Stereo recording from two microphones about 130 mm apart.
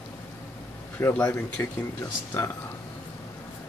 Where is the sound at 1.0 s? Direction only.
15° left (ahead or behind).